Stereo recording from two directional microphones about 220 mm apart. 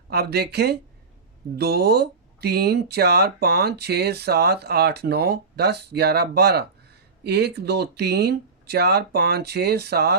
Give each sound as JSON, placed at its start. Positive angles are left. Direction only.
{"t": 0.1, "sound": "speech", "side_deg": -45}